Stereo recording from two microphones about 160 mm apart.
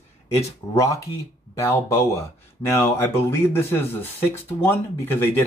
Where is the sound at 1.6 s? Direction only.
15° left (ahead or behind).